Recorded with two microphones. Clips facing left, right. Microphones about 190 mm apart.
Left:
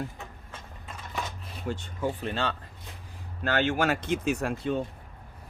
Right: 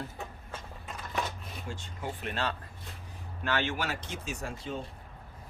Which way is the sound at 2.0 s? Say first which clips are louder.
Left 4 dB; 30° left (ahead or behind).